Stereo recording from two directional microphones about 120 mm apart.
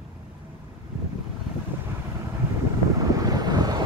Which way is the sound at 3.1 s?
30° right (ahead or behind).